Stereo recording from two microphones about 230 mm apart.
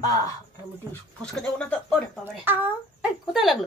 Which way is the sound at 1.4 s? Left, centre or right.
Centre.